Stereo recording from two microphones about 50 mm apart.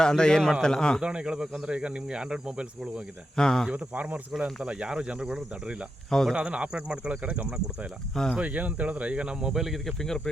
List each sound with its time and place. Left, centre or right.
0.0 s a man's voice: centre
1.0 s speech: centre
3.3 s a man's voice: centre
3.7 s speech: right
4.3 s speech: centre
6.1 s a man's voice: centre
6.3 s speech: right
8.1 s a man's voice: centre
8.4 s speech: right; by 10.2 s centre